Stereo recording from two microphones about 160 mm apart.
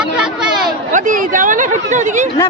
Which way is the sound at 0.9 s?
55° right (ahead or behind).